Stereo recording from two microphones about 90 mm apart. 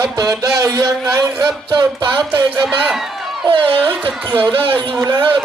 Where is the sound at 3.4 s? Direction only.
90° right.